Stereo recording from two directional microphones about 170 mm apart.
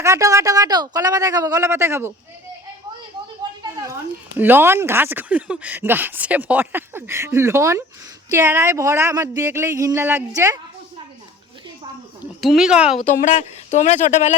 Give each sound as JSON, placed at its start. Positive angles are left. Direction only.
{"t": 0.0, "sound": "a man's voice", "side_deg": -15}
{"t": 3.6, "sound": "a sound", "side_deg": -20}
{"t": 4.4, "sound": "speech", "side_deg": -10}
{"t": 12.2, "sound": "speech", "side_deg": 0}
{"t": 13.0, "sound": "speech", "side_deg": 45}